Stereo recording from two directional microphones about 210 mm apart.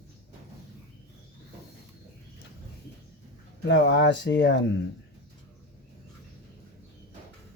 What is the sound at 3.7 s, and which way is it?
Speech, 60° left (ahead or behind).